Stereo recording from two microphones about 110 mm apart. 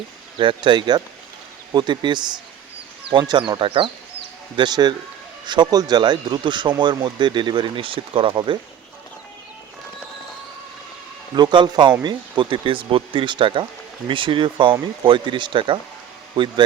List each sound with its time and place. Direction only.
0.3 s speech: 50° right (ahead or behind)
11.3 s speech: 45° right (ahead or behind)